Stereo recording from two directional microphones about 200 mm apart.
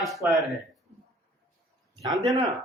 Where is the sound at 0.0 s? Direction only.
Centre (ahead or behind).